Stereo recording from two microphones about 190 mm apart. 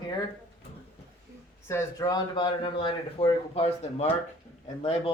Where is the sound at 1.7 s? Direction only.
15° left (ahead or behind); by 4.1 s 30° left (ahead or behind).